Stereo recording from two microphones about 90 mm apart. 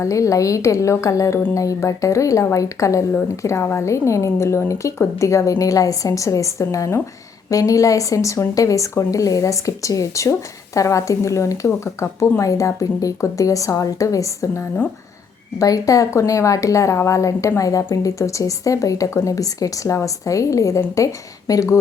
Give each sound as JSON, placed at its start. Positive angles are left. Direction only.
{"t": 0.0, "sound": "speech", "side_deg": 35}